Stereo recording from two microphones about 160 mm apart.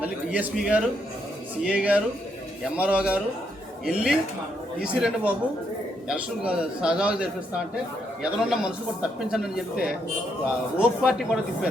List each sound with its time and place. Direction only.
0.0 s a man's voice: 10° right (ahead or behind)
10.8 s a man's voice: 5° right (ahead or behind)